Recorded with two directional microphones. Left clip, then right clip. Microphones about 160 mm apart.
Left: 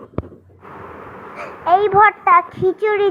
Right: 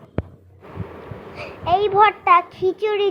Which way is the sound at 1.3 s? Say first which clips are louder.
Left 5 dB; centre (ahead or behind).